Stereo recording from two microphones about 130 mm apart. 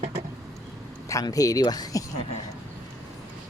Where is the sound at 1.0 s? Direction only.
25° left (ahead or behind).